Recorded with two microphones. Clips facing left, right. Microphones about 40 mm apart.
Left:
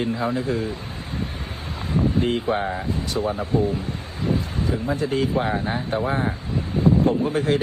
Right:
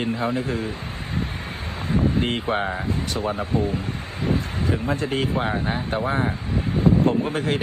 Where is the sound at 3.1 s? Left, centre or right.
Right.